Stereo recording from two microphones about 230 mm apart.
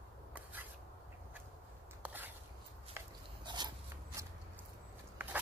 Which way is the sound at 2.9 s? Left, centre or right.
Centre.